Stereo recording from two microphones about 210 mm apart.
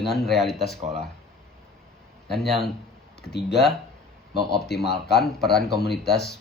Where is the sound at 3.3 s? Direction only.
50° left (ahead or behind).